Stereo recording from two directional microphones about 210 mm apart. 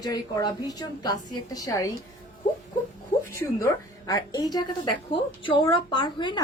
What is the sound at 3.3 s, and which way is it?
A woman's voice, 15° left (ahead or behind).